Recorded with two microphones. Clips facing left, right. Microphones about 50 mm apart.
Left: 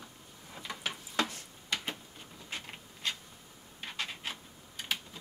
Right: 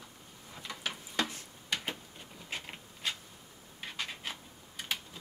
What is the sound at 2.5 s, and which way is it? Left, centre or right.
Printer, centre.